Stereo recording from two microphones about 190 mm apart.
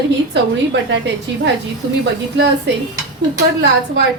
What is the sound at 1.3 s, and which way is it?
Speech, 70° right (ahead or behind).